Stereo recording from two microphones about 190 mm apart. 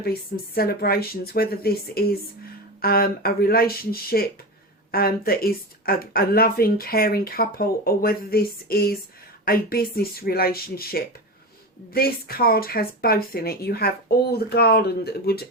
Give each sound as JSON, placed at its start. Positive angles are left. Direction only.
{"t": 0.0, "sound": "speech", "side_deg": 55}